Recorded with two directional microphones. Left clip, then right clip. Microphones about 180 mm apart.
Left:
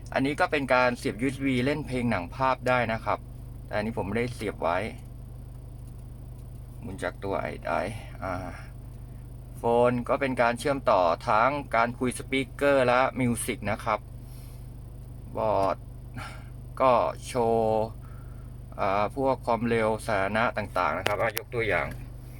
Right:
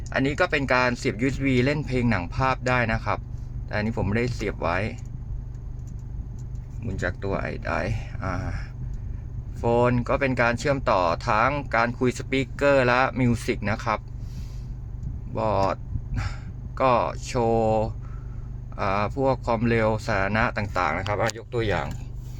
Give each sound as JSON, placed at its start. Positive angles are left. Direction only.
{"t": 0.1, "sound": "speech", "side_deg": -15}
{"t": 6.8, "sound": "speech", "side_deg": -10}
{"t": 15.4, "sound": "speech", "side_deg": -15}